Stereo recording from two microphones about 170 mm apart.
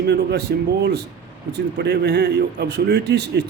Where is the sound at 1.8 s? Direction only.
80° right.